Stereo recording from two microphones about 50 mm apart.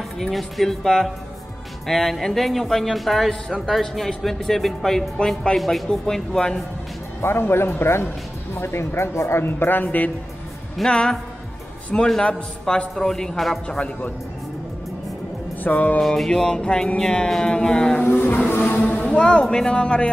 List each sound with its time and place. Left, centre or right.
0.3 s speech: centre
5.6 s speech: centre
7.2 s speech: left
9.5 s speech: left
9.8 s music: left
10.9 s speech: centre
12.2 s speech: centre
13.7 s speech: left
15.6 s music: left
16.3 s speech: centre
18.1 s music: left
18.5 s music: left
18.9 s speech: centre